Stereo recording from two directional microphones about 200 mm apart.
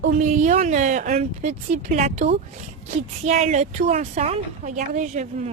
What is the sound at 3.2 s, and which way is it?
A woman's voice, 35° right (ahead or behind).